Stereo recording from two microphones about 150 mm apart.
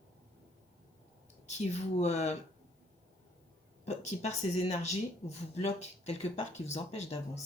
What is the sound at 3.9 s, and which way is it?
Speech, 45° left (ahead or behind).